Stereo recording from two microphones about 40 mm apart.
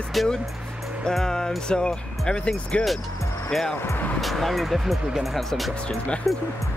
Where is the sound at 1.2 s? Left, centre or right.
Centre.